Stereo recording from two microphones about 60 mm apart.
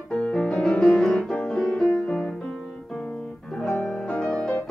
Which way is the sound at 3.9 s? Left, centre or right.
Centre.